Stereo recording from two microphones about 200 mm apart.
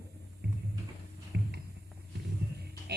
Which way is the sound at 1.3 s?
55° right (ahead or behind).